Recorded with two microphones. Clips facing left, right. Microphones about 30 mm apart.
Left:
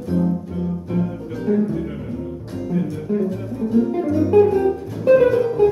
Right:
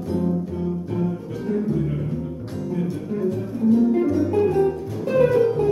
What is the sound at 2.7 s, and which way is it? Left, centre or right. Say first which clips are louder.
Music: left 4 dB; centre.